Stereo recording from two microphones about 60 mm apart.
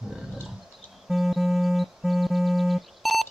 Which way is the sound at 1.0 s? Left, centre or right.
Centre.